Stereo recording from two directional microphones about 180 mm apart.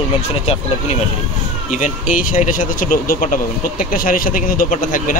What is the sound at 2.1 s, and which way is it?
Speech, 45° left (ahead or behind).